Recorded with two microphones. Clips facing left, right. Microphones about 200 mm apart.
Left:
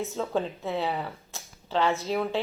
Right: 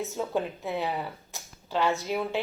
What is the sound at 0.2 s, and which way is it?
Speech, 15° right (ahead or behind).